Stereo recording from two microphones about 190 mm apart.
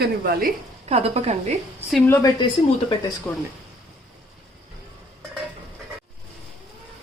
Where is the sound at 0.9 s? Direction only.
35° right (ahead or behind).